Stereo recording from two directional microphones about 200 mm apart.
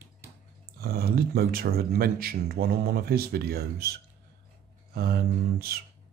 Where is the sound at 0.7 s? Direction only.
50° right (ahead or behind).